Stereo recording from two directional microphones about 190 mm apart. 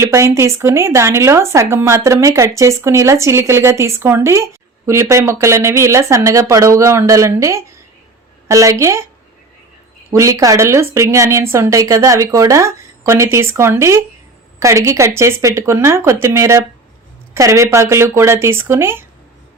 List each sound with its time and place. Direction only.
0.0 s speech: 15° right (ahead or behind)
10.1 s speech: 15° right (ahead or behind)